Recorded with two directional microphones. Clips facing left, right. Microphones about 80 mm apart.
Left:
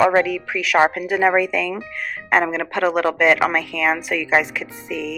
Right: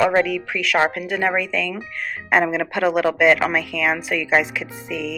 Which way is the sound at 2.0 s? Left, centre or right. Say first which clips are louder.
Even; centre.